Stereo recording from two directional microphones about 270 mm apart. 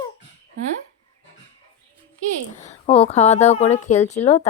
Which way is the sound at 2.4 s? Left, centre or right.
Left.